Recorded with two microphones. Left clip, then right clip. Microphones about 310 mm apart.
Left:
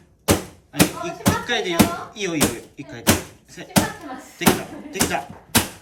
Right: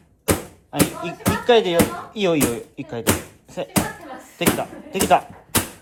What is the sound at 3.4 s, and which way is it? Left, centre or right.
Bouncing, right.